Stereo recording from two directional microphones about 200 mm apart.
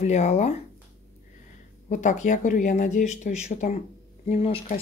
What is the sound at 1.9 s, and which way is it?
Speech, 35° left (ahead or behind).